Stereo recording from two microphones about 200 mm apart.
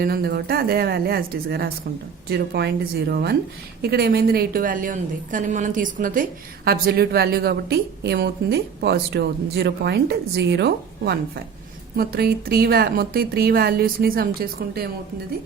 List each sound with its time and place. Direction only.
0.0 s a woman's voice: 50° right (ahead or behind)